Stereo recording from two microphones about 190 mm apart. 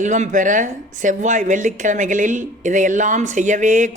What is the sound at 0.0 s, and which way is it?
A man's voice, 40° right (ahead or behind).